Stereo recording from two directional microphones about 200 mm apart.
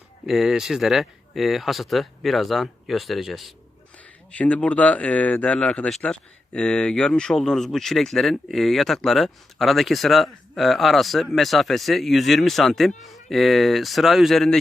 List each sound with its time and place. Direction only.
0.3 s speech: centre (ahead or behind)